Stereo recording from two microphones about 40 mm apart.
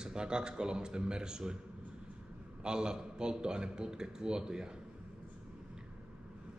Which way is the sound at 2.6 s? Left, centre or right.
Centre.